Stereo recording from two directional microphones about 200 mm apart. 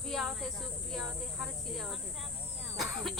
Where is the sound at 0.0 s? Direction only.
Centre (ahead or behind).